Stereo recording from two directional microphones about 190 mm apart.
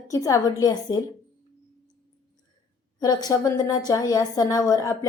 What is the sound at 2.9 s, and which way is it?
A woman's voice, 20° left (ahead or behind).